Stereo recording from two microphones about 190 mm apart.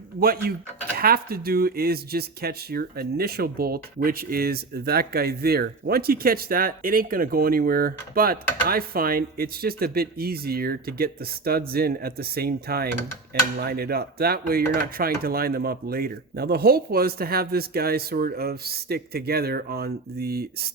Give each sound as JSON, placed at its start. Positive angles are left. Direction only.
{"t": 0.2, "sound": "speech", "side_deg": -50}